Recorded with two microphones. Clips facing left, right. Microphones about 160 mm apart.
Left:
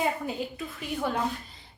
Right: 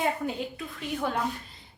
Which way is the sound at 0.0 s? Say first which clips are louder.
Even; centre (ahead or behind).